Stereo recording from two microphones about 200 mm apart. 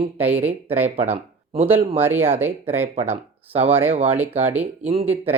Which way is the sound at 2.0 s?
10° right (ahead or behind).